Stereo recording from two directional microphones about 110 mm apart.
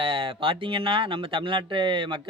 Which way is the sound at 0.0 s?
55° right (ahead or behind).